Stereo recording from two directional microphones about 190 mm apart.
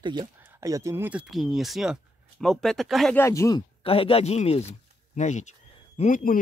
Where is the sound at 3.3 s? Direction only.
15° left (ahead or behind).